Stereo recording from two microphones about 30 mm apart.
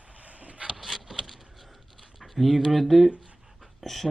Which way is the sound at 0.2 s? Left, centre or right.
Right.